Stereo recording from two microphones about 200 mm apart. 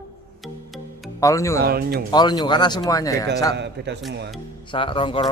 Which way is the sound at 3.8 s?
60° right (ahead or behind).